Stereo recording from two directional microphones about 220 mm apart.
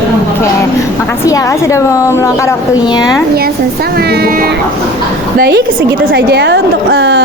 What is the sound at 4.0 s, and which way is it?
A woman's voice, 45° right (ahead or behind).